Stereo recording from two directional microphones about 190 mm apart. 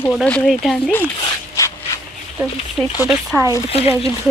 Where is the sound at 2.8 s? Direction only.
10° right (ahead or behind).